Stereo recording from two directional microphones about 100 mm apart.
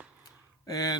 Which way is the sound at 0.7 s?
35° left (ahead or behind).